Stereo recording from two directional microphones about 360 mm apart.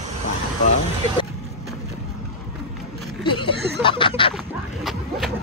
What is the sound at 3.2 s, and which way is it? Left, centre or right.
Speech, centre.